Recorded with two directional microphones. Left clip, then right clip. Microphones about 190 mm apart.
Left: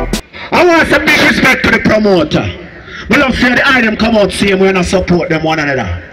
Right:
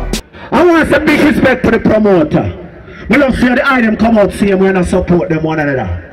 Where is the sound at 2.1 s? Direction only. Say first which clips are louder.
Even; 50° right (ahead or behind).